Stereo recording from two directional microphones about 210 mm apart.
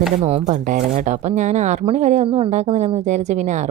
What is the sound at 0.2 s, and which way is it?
A woman's voice, 30° right (ahead or behind).